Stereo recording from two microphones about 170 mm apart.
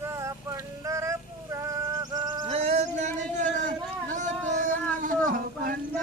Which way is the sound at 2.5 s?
40° right (ahead or behind).